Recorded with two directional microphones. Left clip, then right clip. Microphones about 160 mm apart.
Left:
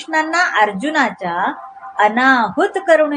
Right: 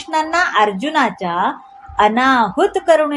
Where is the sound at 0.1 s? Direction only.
30° right (ahead or behind).